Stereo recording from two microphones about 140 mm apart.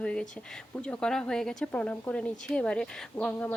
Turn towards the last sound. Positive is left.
turn(degrees=10)  # may be behind; listen again after turning